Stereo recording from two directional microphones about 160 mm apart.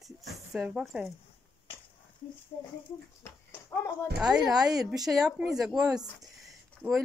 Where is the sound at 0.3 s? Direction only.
5° right (ahead or behind).